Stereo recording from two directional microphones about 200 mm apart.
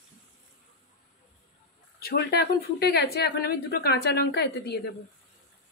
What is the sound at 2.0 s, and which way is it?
Speech, 50° left (ahead or behind).